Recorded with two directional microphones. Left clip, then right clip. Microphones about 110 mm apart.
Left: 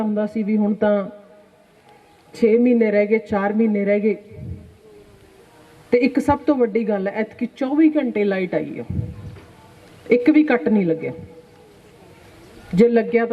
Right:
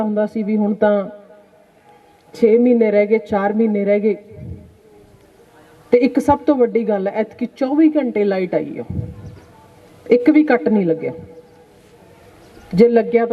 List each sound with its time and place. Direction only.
0.0 s a woman's voice: 25° right (ahead or behind)
2.3 s a woman's voice: 15° right (ahead or behind)
5.9 s a woman's voice: 20° right (ahead or behind)
12.5 s a man's voice: 15° right (ahead or behind)